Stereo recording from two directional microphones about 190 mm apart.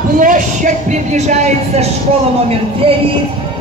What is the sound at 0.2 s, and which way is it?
Speech, 40° right (ahead or behind).